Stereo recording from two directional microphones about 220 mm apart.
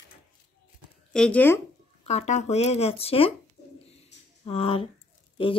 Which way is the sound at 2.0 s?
30° left (ahead or behind).